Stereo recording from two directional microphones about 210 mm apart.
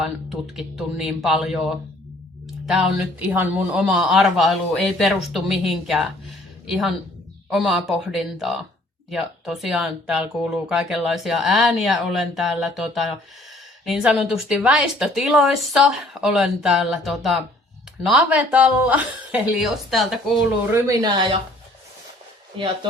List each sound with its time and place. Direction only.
0.0 s speech: centre (ahead or behind)
2.6 s speech: 5° right (ahead or behind)
20.7 s speech: 15° right (ahead or behind)
22.5 s speech: 25° right (ahead or behind)